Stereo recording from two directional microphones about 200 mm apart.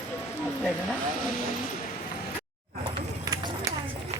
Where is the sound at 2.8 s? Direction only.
20° right (ahead or behind).